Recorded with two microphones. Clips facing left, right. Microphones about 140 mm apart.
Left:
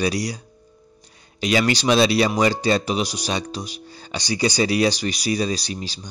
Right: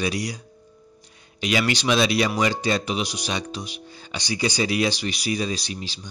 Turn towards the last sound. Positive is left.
turn(degrees=40)  # may be behind; listen again after turning